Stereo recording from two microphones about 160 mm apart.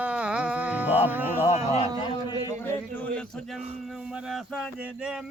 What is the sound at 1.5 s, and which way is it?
Speech, 45° left (ahead or behind).